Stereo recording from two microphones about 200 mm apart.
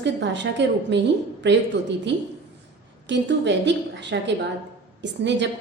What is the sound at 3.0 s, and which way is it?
A woman's voice, 60° right (ahead or behind).